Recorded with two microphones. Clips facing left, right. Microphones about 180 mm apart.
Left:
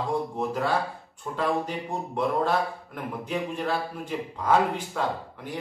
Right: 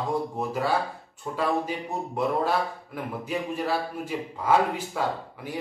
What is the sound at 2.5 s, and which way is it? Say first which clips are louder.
A man's voice: left 1 dB; 5° right (ahead or behind).